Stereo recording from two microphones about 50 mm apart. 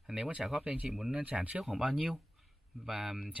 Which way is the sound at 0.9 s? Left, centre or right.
Centre.